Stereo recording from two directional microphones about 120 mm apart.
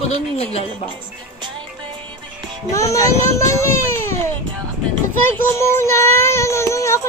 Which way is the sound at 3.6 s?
20° left (ahead or behind).